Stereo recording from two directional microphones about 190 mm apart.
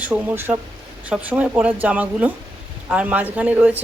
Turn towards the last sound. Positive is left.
turn(degrees=-10)  # may be behind; listen again after turning